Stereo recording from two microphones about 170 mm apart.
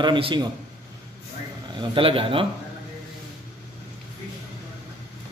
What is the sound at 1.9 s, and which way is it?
Speech, 30° right (ahead or behind).